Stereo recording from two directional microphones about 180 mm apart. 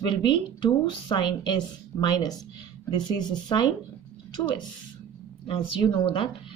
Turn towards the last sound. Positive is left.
turn(degrees=30)  # may be behind; listen again after turning